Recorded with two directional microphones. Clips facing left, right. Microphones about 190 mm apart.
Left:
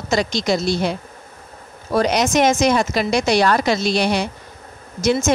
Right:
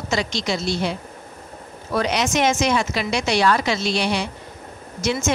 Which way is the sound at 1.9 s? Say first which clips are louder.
Left 4 dB; 40° left (ahead or behind).